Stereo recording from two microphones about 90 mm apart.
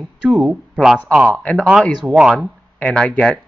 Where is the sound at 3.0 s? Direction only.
10° left (ahead or behind).